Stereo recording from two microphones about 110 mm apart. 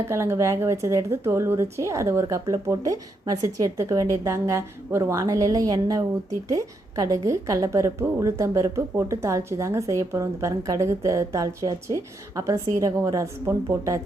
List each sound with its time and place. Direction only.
0.1 s a woman's voice: 25° right (ahead or behind)